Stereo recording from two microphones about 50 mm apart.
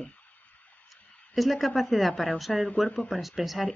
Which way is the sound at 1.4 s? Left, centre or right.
Centre.